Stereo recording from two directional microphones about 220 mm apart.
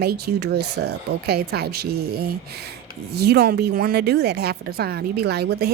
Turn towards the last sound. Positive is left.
turn(degrees=-45)  # may be behind; listen again after turning